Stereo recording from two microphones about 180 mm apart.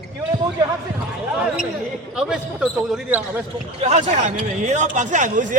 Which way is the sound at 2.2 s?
5° right (ahead or behind).